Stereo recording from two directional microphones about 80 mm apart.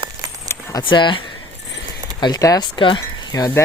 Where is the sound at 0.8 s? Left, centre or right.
Left.